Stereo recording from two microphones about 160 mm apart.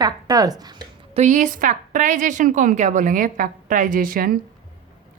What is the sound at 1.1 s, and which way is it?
A woman's voice, 50° right (ahead or behind).